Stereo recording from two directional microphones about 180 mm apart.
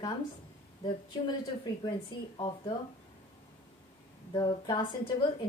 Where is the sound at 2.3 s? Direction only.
25° left (ahead or behind).